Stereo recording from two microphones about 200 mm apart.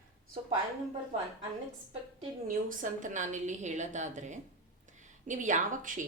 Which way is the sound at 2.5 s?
40° right (ahead or behind).